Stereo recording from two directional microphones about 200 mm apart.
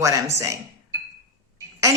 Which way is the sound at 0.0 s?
15° right (ahead or behind).